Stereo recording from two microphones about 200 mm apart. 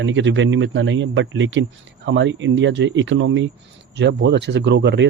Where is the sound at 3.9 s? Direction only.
60° right (ahead or behind).